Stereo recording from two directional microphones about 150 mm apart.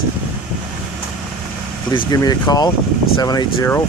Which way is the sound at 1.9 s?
25° left (ahead or behind).